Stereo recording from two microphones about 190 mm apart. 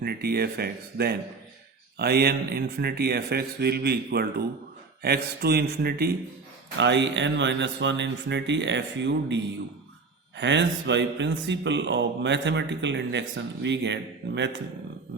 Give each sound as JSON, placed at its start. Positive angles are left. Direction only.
{"t": 0.0, "sound": "speech", "side_deg": -55}
{"t": 6.7, "sound": "speech", "side_deg": -70}